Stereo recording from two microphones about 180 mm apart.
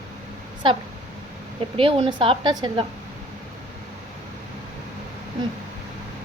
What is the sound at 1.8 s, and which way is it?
Speech, 30° right (ahead or behind).